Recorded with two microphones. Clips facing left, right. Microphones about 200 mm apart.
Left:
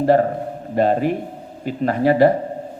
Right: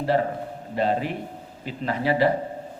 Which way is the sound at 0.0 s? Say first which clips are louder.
Left 7 dB; 50° left (ahead or behind).